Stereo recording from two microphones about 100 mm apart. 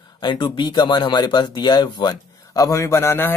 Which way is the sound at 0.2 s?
50° left (ahead or behind).